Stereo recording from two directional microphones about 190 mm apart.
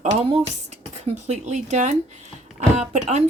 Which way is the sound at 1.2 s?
40° right (ahead or behind).